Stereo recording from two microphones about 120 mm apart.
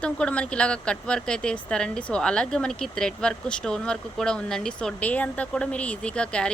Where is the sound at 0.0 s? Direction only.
10° left (ahead or behind).